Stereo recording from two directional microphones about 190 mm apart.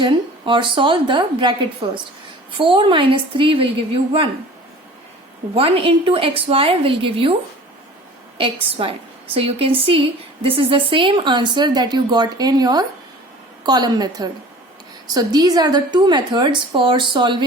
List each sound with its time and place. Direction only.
0.0 s a woman's voice: 25° right (ahead or behind)
5.5 s a woman's voice: 30° right (ahead or behind)
8.4 s a woman's voice: 30° right (ahead or behind)